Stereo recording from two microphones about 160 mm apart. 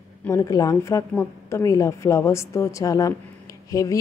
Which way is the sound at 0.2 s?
20° left (ahead or behind).